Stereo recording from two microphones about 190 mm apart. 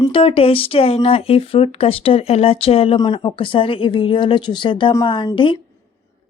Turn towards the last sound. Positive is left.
turn(degrees=25)  # may be behind; listen again after turning